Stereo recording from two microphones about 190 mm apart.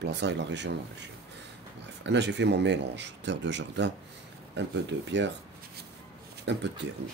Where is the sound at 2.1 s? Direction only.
65° right (ahead or behind).